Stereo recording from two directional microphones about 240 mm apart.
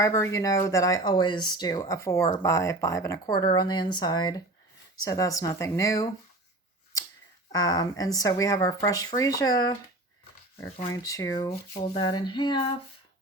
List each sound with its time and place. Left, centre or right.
0.0 s speech: centre
7.5 s speech: centre
10.9 s speech: centre